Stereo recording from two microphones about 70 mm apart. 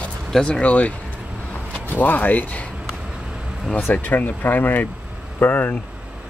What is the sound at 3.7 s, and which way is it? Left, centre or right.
Speech, left.